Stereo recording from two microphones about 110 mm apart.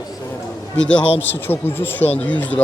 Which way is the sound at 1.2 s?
20° left (ahead or behind).